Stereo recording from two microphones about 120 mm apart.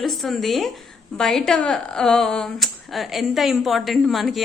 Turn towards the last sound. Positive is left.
turn(degrees=0)  # may be behind; listen again after turning